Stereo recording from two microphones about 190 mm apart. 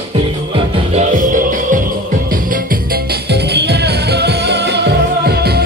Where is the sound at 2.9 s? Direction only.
60° right (ahead or behind).